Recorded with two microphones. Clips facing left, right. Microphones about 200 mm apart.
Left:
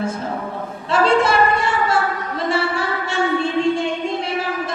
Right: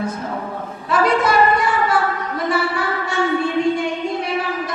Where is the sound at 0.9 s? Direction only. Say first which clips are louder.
Left 1 dB; 25° left (ahead or behind).